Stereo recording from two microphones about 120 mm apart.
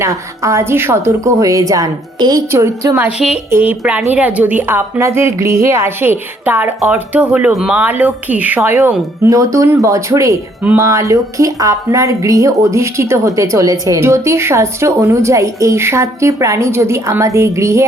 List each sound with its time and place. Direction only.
0.0 s a woman's voice: 25° right (ahead or behind)
2.5 s a woman's voice: 25° right (ahead or behind)
9.3 s a woman's voice: 30° right (ahead or behind)